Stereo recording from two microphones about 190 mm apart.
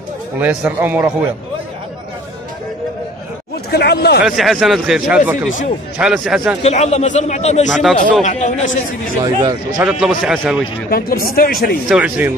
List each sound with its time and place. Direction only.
0.4 s speech: 10° right (ahead or behind)
3.7 s speech: 60° left (ahead or behind)
4.2 s speech: centre (ahead or behind)
6.6 s a man's voice: 35° left (ahead or behind)
9.2 s a man's voice: 20° right (ahead or behind)
9.8 s speech: 5° right (ahead or behind)
10.9 s speech: 50° left (ahead or behind)
11.9 s speech: 5° right (ahead or behind)